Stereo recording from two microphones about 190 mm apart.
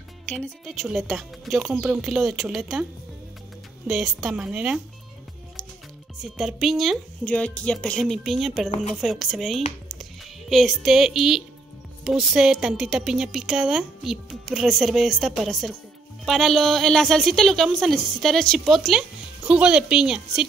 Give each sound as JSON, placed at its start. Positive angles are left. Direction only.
{"t": 0.3, "sound": "a woman's voice", "side_deg": 0}
{"t": 6.3, "sound": "a woman's voice", "side_deg": 0}
{"t": 8.6, "sound": "speech", "side_deg": 35}
{"t": 8.9, "sound": "a woman's voice", "side_deg": 0}